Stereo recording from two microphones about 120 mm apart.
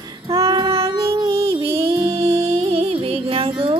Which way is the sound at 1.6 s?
55° right (ahead or behind).